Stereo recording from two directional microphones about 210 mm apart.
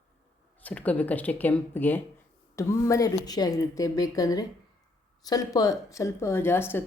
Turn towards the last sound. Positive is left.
turn(degrees=10)  # may be behind; listen again after turning